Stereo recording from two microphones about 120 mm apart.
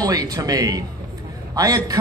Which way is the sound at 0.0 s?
30° right (ahead or behind).